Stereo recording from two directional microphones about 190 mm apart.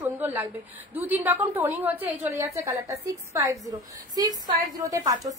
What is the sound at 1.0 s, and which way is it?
A woman's voice, 10° right (ahead or behind).